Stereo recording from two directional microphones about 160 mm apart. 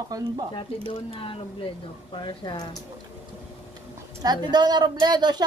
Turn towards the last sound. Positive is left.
turn(degrees=-25)  # may be behind; listen again after turning